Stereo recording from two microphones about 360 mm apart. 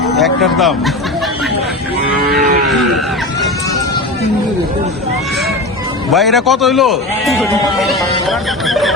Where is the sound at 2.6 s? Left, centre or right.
Centre.